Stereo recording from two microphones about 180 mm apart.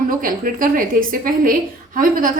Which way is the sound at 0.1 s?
50° right (ahead or behind).